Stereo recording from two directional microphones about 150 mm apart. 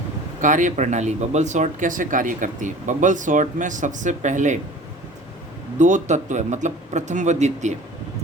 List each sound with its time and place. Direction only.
0.4 s speech: 55° right (ahead or behind)
5.8 s a man's voice: 50° right (ahead or behind)